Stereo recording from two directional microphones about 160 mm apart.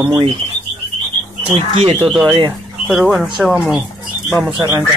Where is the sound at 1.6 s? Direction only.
40° right (ahead or behind).